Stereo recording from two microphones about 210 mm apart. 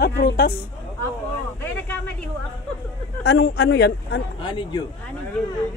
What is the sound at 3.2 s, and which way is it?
Speech, 50° left (ahead or behind).